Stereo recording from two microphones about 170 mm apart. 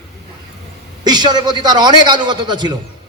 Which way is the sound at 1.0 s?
25° right (ahead or behind).